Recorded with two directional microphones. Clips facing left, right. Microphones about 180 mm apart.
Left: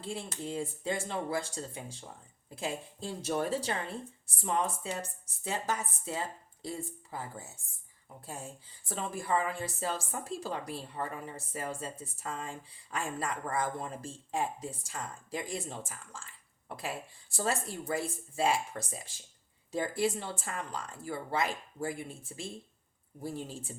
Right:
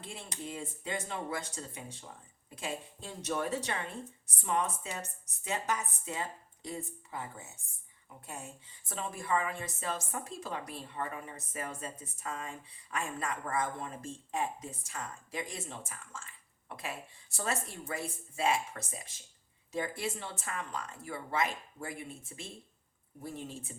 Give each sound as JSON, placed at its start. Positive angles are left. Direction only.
{"t": 0.0, "sound": "a woman's voice", "side_deg": 35}
{"t": 8.9, "sound": "a woman's voice", "side_deg": 35}